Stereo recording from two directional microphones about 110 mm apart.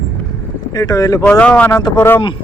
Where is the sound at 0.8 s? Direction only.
30° left (ahead or behind).